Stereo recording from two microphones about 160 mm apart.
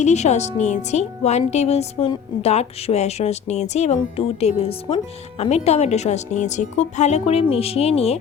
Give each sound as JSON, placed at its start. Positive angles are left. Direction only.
{"t": 0.0, "sound": "speech", "side_deg": 45}